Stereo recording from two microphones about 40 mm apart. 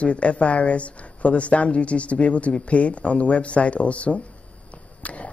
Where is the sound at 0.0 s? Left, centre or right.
Left.